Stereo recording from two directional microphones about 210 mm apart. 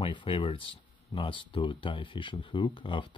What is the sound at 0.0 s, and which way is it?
Speech, 25° left (ahead or behind).